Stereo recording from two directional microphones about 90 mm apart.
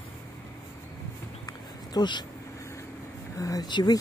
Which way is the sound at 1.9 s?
55° left (ahead or behind).